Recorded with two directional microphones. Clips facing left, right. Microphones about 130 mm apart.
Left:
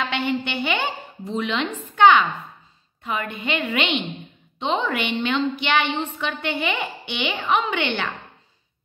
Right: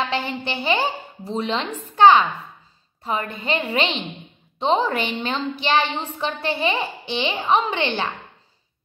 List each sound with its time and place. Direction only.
0.0 s a woman's voice: 35° right (ahead or behind)